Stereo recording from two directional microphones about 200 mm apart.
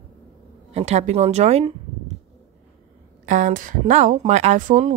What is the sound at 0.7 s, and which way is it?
A woman's voice, 35° right (ahead or behind).